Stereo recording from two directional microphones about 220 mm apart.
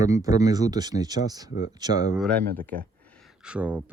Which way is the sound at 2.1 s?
5° left (ahead or behind).